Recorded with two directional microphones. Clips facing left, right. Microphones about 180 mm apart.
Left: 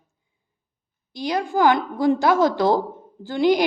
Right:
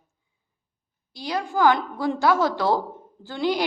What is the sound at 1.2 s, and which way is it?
A woman's voice, 20° left (ahead or behind).